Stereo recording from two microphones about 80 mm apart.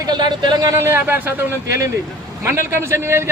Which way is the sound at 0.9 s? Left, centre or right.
Right.